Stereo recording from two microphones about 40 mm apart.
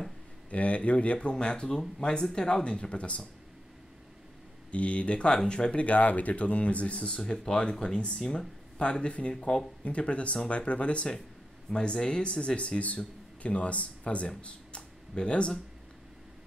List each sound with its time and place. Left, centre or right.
0.5 s speech: left
4.6 s speech: left